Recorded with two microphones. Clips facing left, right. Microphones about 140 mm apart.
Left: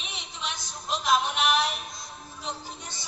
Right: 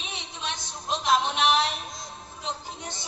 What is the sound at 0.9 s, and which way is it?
Music, 25° right (ahead or behind).